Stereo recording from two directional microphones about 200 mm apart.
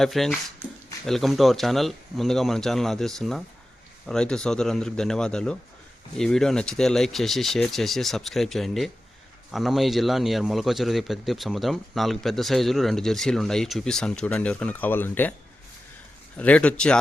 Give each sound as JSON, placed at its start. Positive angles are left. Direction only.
{"t": 0.0, "sound": "a man's voice", "side_deg": 0}
{"t": 16.4, "sound": "a man's voice", "side_deg": 5}